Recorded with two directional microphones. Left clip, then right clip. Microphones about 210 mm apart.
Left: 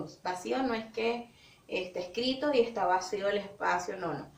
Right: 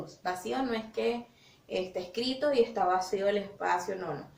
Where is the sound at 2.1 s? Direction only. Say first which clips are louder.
Right 1 dB; 10° right (ahead or behind).